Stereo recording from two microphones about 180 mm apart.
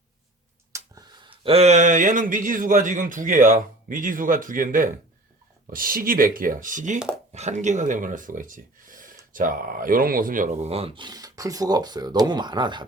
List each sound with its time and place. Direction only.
0.7 s speech: 20° right (ahead or behind)